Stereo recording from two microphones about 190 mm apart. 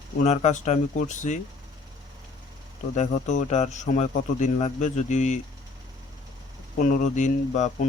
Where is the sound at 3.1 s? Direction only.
40° left (ahead or behind).